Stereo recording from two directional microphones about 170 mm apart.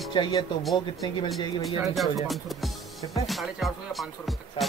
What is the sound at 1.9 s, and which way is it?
Speech, centre (ahead or behind).